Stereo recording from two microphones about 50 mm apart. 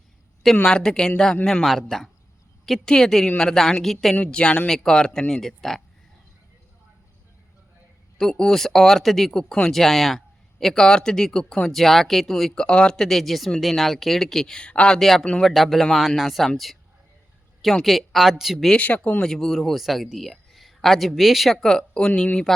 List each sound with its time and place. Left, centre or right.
0.5 s speech: centre
1.6 s speech: centre
2.8 s speech: centre
4.2 s speech: left
4.7 s speech: centre
8.2 s speech: centre
11.7 s speech: centre
12.5 s speech: centre
14.7 s speech: left
14.9 s speech: centre
17.8 s speech: centre
18.8 s speech: left
19.2 s speech: centre